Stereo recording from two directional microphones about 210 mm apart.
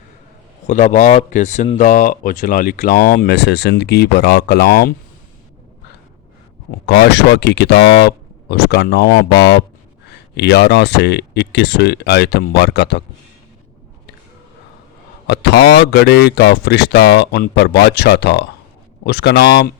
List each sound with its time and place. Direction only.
0.7 s speech: 35° left (ahead or behind)
6.7 s speech: 50° left (ahead or behind)
15.3 s speech: 50° left (ahead or behind)